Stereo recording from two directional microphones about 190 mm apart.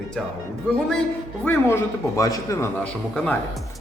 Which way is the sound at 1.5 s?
15° left (ahead or behind).